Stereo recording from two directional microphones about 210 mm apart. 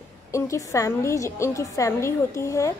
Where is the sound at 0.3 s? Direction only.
15° left (ahead or behind).